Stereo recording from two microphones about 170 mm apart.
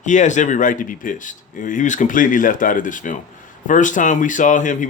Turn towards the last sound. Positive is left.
turn(degrees=50)  # may be behind; listen again after turning